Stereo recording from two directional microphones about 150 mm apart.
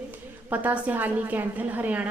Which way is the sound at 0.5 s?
10° right (ahead or behind).